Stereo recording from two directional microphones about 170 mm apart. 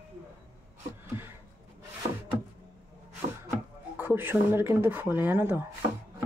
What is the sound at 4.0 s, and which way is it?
Speech, 10° right (ahead or behind).